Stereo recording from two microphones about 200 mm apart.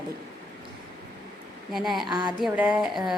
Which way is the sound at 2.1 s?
20° right (ahead or behind).